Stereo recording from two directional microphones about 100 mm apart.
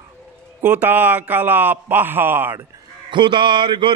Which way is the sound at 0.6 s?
15° right (ahead or behind).